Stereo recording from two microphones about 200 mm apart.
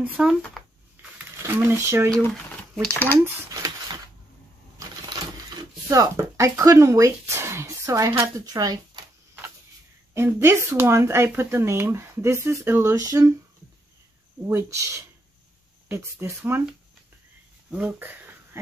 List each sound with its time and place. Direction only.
0.0 s speech: 5° right (ahead or behind)
1.1 s a sound: 10° right (ahead or behind)
2.7 s speech: 5° left (ahead or behind)
3.2 s a sound: 15° right (ahead or behind)
5.9 s speech: 15° right (ahead or behind)
10.1 s speech: 15° right (ahead or behind)
14.5 s speech: 15° right (ahead or behind)
15.9 s speech: 15° right (ahead or behind)
17.6 s a sound: 5° right (ahead or behind)